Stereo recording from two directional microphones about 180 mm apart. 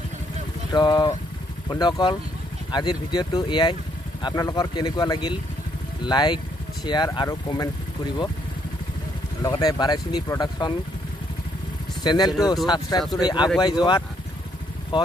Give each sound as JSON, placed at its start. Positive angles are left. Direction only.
{"t": 0.7, "sound": "speech", "side_deg": 25}
{"t": 9.4, "sound": "speech", "side_deg": 20}
{"t": 12.0, "sound": "speech", "side_deg": 25}